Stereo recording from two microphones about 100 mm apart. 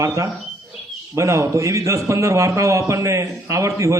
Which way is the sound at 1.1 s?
30° right (ahead or behind).